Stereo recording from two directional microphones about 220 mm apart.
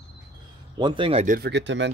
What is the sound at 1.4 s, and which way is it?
Speech, 50° right (ahead or behind).